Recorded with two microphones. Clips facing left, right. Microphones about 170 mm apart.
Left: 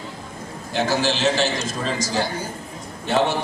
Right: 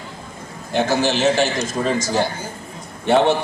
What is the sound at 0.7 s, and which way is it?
A man's voice, 50° right (ahead or behind).